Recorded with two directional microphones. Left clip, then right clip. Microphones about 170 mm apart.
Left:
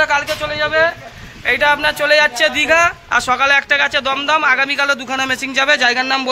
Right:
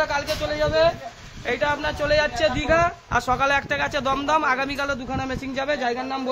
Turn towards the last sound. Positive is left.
turn(degrees=5)  # may be behind; listen again after turning